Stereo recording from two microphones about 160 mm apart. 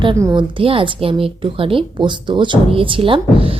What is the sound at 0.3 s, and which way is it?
A woman's voice, 35° right (ahead or behind).